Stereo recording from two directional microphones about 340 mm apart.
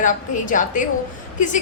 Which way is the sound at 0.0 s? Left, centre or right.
Left.